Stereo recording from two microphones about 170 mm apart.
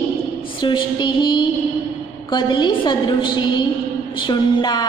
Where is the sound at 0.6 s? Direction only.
30° left (ahead or behind).